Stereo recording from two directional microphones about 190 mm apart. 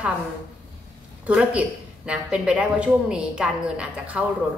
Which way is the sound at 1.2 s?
5° right (ahead or behind).